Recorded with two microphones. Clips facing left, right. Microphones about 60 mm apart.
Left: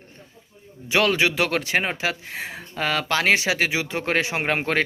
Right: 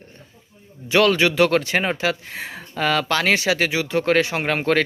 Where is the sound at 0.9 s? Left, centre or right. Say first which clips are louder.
Right 3 dB; centre.